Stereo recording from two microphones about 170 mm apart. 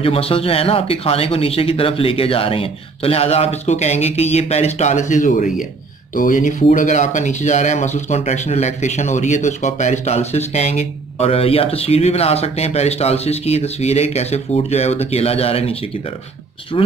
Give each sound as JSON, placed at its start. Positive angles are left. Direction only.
{"t": 0.0, "sound": "speech", "side_deg": 35}